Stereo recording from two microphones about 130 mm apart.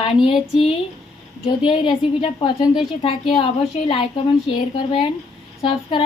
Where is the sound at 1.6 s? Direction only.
40° left (ahead or behind).